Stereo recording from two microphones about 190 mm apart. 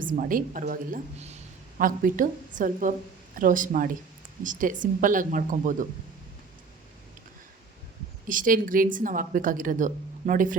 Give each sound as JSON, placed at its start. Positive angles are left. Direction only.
{"t": 0.0, "sound": "a woman's voice", "side_deg": -45}
{"t": 8.3, "sound": "a woman's voice", "side_deg": -45}